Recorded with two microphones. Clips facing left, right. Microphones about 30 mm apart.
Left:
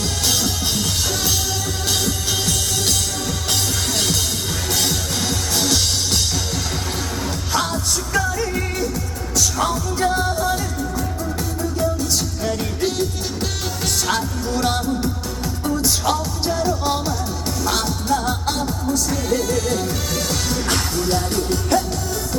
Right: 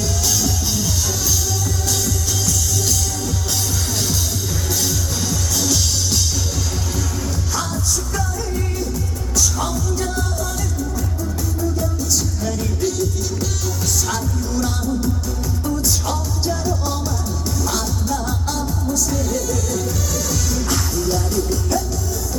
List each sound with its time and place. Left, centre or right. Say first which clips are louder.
1.9 s music: left 3 dB; left
7.5 s music: left 3 dB; left
11.8 s music: left 2 dB; left
14.1 s music: left 2 dB; left